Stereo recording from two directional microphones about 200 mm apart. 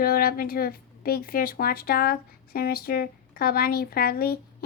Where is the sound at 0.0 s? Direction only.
50° left (ahead or behind).